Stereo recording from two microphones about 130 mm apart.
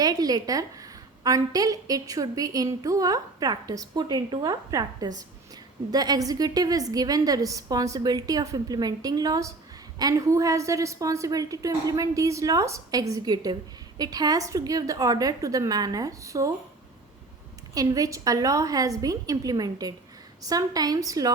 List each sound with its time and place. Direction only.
0.0 s a woman's voice: 30° right (ahead or behind)
17.7 s a woman's voice: 25° right (ahead or behind)